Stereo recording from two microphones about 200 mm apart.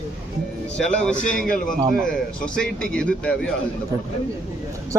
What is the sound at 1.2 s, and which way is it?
Speech, 40° left (ahead or behind).